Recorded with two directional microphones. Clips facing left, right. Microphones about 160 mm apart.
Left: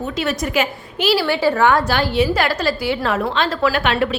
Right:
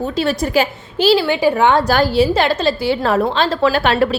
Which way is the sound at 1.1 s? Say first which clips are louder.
Even; 15° right (ahead or behind).